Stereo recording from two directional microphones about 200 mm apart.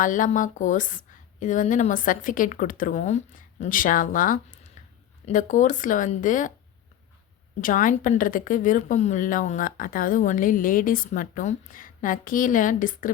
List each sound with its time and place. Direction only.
0.0 s a woman's voice: 40° left (ahead or behind)
7.6 s a woman's voice: 40° left (ahead or behind)